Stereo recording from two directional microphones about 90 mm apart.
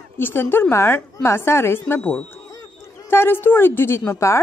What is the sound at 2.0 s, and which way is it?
Speech, 15° left (ahead or behind).